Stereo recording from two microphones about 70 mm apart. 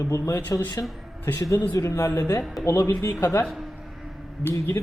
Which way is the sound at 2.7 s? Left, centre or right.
Left.